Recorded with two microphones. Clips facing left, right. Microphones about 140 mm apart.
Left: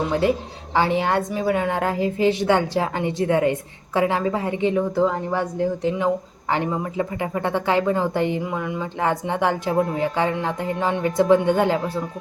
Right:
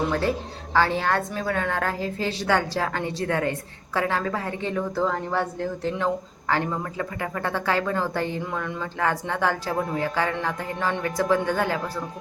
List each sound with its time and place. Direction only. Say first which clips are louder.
0.1 s a woman's voice: left 4 dB; 15° left (ahead or behind)